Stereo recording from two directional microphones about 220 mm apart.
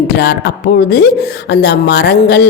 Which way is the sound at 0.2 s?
50° left (ahead or behind).